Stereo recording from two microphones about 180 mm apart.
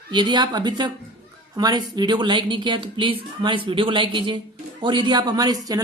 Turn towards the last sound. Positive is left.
turn(degrees=-20)  # may be behind; listen again after turning